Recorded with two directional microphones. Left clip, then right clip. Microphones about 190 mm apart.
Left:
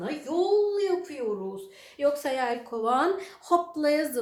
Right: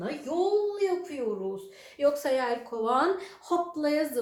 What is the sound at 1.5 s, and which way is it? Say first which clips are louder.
Speech: even; 10° left (ahead or behind).